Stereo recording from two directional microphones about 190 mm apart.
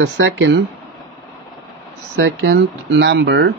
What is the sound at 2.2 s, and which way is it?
Speech, 65° right (ahead or behind).